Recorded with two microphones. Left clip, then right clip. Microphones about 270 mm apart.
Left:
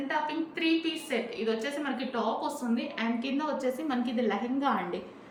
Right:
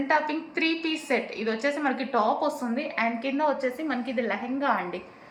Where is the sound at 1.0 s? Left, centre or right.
Centre.